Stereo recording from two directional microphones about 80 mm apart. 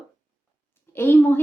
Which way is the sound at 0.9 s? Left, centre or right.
Left.